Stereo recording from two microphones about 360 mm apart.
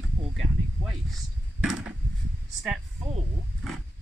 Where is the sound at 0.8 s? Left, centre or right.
Centre.